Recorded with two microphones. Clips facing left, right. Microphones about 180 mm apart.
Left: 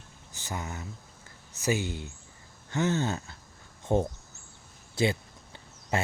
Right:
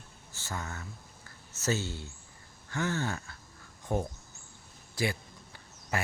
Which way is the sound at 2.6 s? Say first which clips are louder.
Left 5 dB; 20° left (ahead or behind).